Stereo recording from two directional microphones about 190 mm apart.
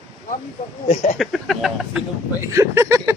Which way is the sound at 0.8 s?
40° left (ahead or behind).